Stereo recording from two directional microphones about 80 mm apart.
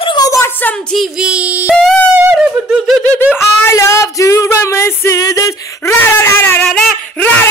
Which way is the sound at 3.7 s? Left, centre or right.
Left.